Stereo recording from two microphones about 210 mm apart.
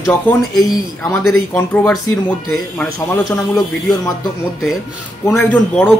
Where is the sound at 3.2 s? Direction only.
15° left (ahead or behind).